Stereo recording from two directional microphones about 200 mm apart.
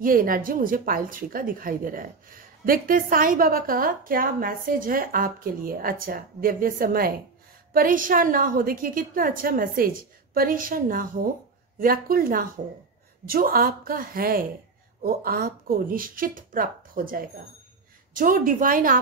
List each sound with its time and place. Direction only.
0.0 s speech: 45° right (ahead or behind)